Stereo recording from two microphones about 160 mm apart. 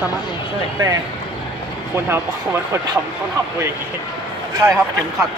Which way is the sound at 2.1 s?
15° right (ahead or behind).